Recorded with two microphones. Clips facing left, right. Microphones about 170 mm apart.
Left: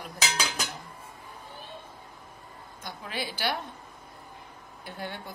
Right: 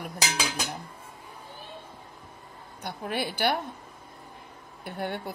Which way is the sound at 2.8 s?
60° right (ahead or behind).